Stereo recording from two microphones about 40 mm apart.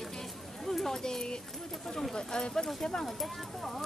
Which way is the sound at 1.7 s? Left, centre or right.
Centre.